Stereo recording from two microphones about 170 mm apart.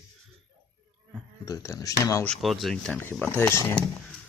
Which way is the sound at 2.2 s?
Centre (ahead or behind).